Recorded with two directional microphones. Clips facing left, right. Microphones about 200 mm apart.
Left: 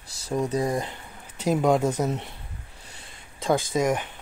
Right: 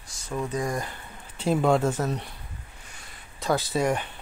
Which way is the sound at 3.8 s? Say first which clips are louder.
Left 1 dB; 15° left (ahead or behind).